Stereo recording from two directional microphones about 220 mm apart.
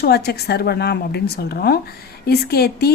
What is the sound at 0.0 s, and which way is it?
Speech, 45° left (ahead or behind).